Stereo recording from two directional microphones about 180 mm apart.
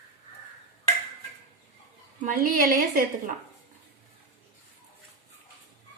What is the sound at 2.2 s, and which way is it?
Speech, 50° right (ahead or behind).